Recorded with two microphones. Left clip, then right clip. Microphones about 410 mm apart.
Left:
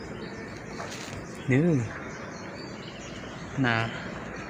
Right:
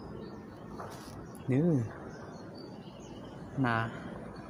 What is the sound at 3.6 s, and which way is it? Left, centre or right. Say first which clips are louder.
Speech: left 5 dB; right.